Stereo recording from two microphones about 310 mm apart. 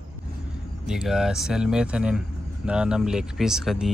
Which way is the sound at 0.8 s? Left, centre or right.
Centre.